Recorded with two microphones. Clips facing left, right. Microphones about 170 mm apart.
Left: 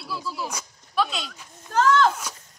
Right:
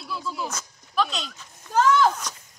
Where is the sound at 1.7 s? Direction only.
10° right (ahead or behind).